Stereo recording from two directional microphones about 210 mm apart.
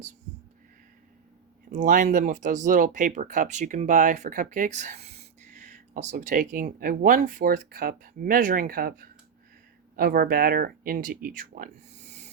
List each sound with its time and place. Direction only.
1.7 s speech: 40° right (ahead or behind)